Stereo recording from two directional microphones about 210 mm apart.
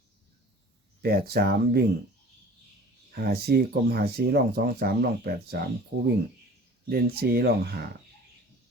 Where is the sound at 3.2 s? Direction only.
45° right (ahead or behind).